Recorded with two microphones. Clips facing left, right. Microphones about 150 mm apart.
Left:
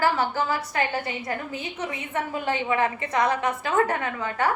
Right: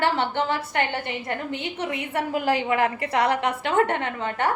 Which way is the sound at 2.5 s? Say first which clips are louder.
Right 1 dB; 75° right (ahead or behind).